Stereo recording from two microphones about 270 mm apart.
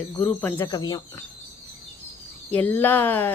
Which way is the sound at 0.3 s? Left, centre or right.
Centre.